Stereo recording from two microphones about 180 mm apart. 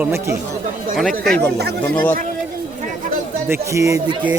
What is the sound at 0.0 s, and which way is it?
Speech, 15° right (ahead or behind).